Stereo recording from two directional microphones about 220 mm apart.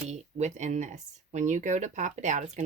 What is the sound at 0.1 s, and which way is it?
Speech, 30° right (ahead or behind).